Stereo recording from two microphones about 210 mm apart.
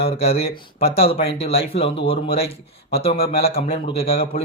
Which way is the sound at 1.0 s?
30° left (ahead or behind).